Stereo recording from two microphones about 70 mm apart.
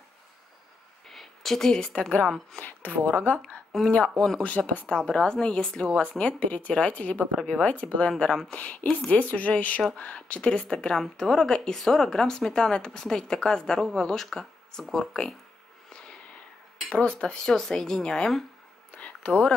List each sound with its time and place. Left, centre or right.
1.0 s a sound: centre
2.2 s a woman's voice: centre
2.6 s speech: left
3.7 s a woman's voice: centre
4.4 s a woman's voice: left
16.9 s a woman's voice: centre
18.9 s a sound: centre